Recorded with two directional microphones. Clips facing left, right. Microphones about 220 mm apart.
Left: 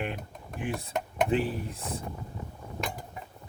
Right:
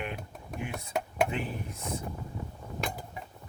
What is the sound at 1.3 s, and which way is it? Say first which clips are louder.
Speech: left 7 dB; 35° left (ahead or behind).